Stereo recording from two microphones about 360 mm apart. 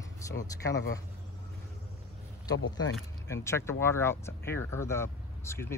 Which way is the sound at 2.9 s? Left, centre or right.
Centre.